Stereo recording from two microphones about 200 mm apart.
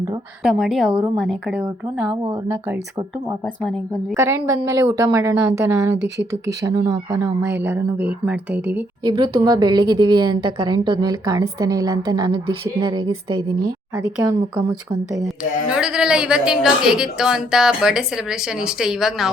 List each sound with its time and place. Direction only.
0.6 s a woman's voice: centre (ahead or behind)
2.2 s a woman's voice: 15° right (ahead or behind)
3.4 s a woman's voice: centre (ahead or behind)
4.1 s a woman's voice: 15° right (ahead or behind)
9.0 s a woman's voice: 20° right (ahead or behind)
15.7 s a woman's voice: 5° right (ahead or behind)